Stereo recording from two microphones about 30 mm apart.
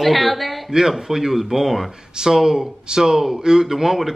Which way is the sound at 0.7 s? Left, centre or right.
Centre.